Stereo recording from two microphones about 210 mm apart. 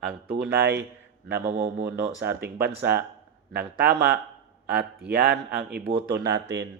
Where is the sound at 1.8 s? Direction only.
55° right (ahead or behind).